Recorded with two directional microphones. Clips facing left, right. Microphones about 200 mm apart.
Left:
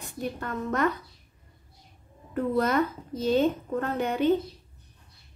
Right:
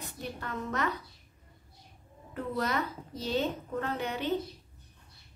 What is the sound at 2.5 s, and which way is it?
A woman's voice, 50° left (ahead or behind).